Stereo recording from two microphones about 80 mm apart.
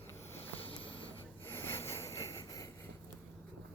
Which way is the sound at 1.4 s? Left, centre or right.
Left.